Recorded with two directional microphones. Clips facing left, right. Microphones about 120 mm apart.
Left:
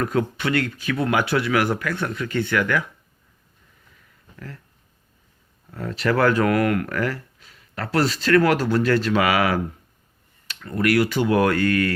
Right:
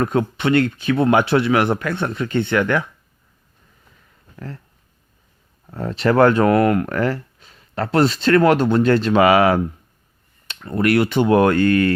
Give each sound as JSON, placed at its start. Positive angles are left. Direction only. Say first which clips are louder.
{"t": 0.0, "sound": "speech", "louder": "right 4 dB", "side_deg": -25}
{"t": 4.4, "sound": "speech", "louder": "right 5 dB", "side_deg": -30}
{"t": 5.7, "sound": "speech", "louder": "right 5 dB", "side_deg": -30}